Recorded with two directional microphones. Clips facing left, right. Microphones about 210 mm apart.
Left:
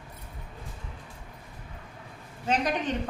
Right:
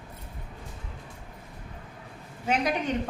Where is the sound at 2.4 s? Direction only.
10° right (ahead or behind).